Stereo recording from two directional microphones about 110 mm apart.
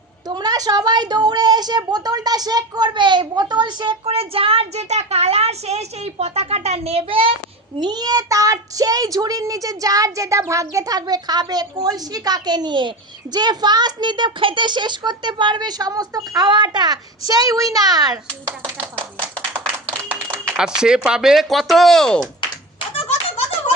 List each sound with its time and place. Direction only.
0.3 s a child's voice: 40° right (ahead or behind)
4.0 s a child's voice: 60° right (ahead or behind)
7.8 s a child's voice: 40° right (ahead or behind)
20.3 s speech: 5° right (ahead or behind)